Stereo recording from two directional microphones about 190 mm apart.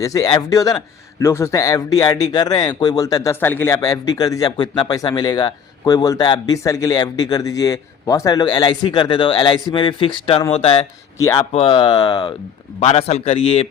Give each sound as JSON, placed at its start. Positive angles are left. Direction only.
{"t": 0.0, "sound": "speech", "side_deg": 20}
{"t": 11.2, "sound": "a man's voice", "side_deg": 15}